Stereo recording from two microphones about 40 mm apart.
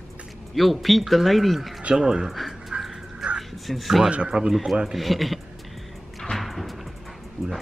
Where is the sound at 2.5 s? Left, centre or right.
Centre.